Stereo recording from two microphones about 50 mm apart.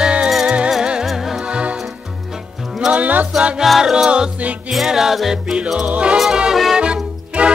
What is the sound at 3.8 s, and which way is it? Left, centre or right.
Music, centre.